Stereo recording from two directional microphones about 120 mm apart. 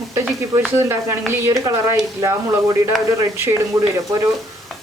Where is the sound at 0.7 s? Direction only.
25° right (ahead or behind).